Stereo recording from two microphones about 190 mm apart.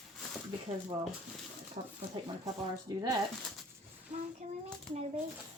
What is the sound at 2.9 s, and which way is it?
Speech, 20° right (ahead or behind).